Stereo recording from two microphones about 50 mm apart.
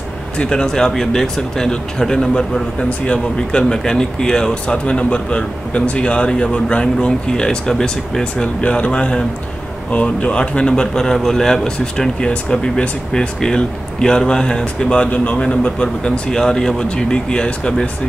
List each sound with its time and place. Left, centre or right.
0.4 s speech: centre